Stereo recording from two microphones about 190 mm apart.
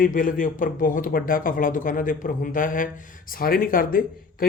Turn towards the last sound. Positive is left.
turn(degrees=50)  # may be behind; listen again after turning